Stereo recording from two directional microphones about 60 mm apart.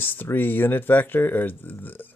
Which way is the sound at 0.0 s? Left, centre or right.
Left.